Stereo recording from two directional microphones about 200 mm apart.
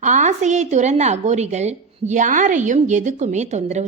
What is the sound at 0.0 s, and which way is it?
A woman's voice, 35° right (ahead or behind).